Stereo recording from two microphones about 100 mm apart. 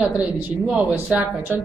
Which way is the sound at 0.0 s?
15° right (ahead or behind).